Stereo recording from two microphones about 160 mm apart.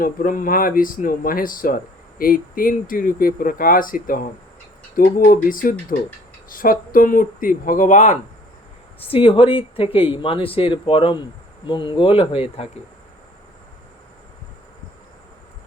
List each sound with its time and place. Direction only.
0.0 s speech: 55° left (ahead or behind)
9.0 s speech: 35° left (ahead or behind)